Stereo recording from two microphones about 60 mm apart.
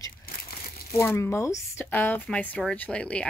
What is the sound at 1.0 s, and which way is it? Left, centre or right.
Speech, left.